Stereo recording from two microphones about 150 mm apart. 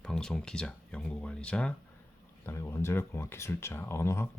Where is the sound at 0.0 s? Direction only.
5° left (ahead or behind).